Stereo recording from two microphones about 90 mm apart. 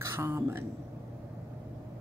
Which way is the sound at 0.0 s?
30° right (ahead or behind).